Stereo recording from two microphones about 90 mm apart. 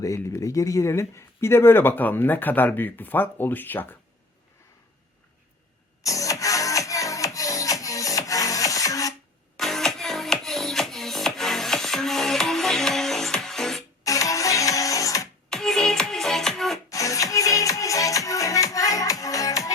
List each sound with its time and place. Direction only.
0.0 s speech: 35° left (ahead or behind); by 3.8 s 20° left (ahead or behind)
6.0 s music: 40° left (ahead or behind)
9.6 s music: 5° left (ahead or behind)
14.0 s music: 40° left (ahead or behind)
15.4 s music: 5° left (ahead or behind)
16.9 s music: 40° left (ahead or behind)